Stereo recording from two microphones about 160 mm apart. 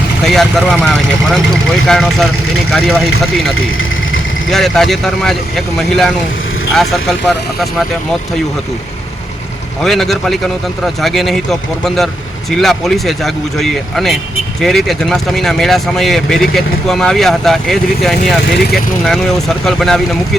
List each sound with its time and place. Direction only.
0.3 s speech: centre (ahead or behind)
9.8 s speech: centre (ahead or behind)
12.5 s speech: centre (ahead or behind)